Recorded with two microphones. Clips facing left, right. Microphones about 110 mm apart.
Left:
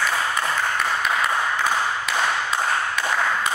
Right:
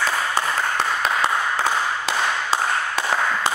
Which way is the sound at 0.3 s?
30° right (ahead or behind).